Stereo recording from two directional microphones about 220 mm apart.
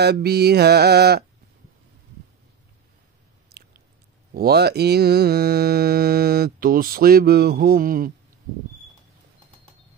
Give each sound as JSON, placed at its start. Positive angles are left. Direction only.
{"t": 0.0, "sound": "mantra", "side_deg": -45}
{"t": 3.4, "sound": "chewing", "side_deg": -45}
{"t": 4.3, "sound": "mantra", "side_deg": -45}